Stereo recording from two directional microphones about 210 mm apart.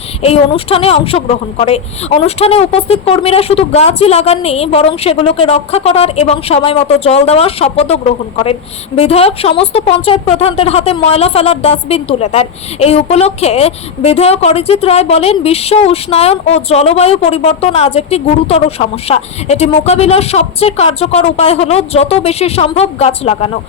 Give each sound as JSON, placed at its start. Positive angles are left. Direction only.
{"t": 0.2, "sound": "speech", "side_deg": 25}
{"t": 9.0, "sound": "speech", "side_deg": 30}